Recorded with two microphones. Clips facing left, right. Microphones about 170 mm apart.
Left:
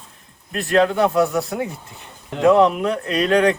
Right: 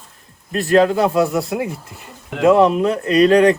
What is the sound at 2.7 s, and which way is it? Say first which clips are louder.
Speech: right 5 dB; 35° right (ahead or behind).